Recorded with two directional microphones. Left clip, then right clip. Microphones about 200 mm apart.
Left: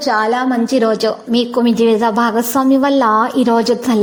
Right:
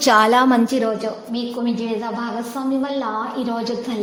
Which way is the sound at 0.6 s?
20° left (ahead or behind).